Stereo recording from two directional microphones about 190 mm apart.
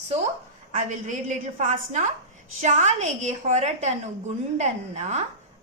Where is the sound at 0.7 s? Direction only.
40° right (ahead or behind).